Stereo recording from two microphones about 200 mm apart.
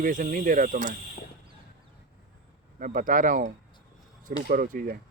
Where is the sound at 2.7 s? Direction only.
40° right (ahead or behind).